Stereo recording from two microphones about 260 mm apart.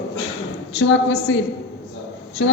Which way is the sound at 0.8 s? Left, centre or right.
Left.